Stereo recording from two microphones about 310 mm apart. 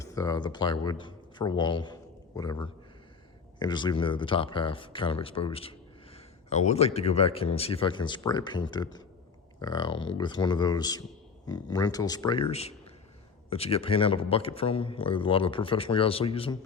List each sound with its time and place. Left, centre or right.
0.0 s a man's voice: centre